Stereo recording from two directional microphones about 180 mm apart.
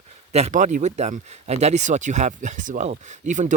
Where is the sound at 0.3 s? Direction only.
40° right (ahead or behind).